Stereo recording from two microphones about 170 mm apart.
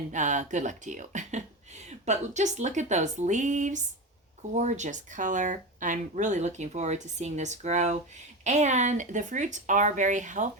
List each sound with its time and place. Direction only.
0.1 s speech: 45° right (ahead or behind)